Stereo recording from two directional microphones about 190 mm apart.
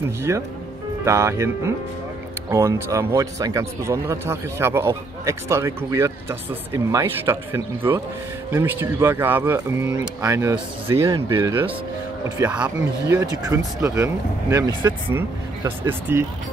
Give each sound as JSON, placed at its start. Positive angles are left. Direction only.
{"t": 0.3, "sound": "a man's voice", "side_deg": -15}
{"t": 13.0, "sound": "a man's voice", "side_deg": -15}